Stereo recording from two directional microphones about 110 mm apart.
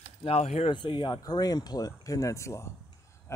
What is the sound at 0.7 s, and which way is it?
Speech, 45° left (ahead or behind).